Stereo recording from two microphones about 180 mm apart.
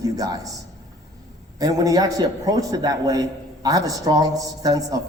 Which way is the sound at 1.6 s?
20° right (ahead or behind).